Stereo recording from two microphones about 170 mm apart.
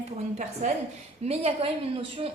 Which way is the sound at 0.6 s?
45° right (ahead or behind).